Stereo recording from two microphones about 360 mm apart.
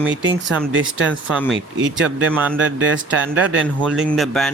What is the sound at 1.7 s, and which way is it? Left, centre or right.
Speech, right.